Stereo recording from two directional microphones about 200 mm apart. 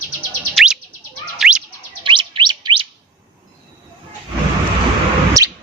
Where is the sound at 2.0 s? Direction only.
25° right (ahead or behind).